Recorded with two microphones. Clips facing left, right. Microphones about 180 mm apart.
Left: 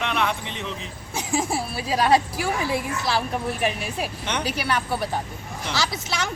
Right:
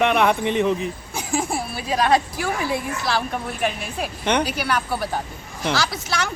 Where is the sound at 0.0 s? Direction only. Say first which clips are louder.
Right 8 dB; 55° right (ahead or behind).